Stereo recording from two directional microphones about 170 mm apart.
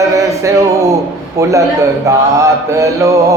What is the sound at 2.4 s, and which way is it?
Mantra, 20° right (ahead or behind).